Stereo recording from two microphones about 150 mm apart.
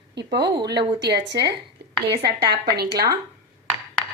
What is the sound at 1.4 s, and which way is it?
Speech, 90° right.